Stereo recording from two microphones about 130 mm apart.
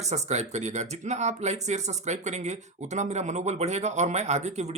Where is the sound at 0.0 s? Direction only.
60° right (ahead or behind).